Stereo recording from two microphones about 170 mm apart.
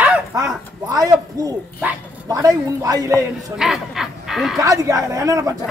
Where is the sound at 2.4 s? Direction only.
20° right (ahead or behind).